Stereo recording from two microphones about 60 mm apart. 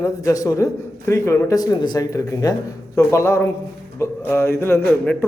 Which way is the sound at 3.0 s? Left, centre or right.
Left.